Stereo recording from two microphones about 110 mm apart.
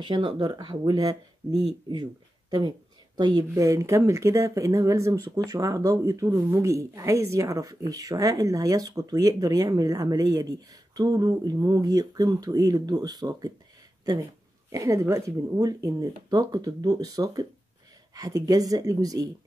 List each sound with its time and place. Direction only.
0.0 s speech: 50° right (ahead or behind)
3.2 s speech: 40° right (ahead or behind)
14.7 s speech: 30° right (ahead or behind)